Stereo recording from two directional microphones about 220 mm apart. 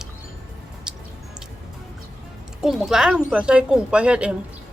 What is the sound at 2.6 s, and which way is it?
Speech, centre (ahead or behind).